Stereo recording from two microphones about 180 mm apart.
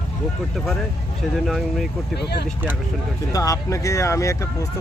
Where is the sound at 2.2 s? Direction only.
65° left (ahead or behind).